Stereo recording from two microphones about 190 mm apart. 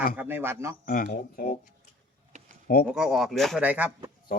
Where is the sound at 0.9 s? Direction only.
50° left (ahead or behind).